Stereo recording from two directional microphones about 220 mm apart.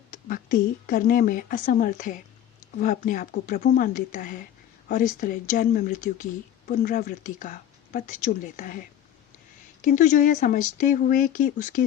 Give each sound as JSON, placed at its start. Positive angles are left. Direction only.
{"t": 0.1, "sound": "a woman's voice", "side_deg": 40}
{"t": 9.8, "sound": "speech", "side_deg": 35}